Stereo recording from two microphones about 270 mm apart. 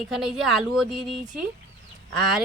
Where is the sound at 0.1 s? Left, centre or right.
Centre.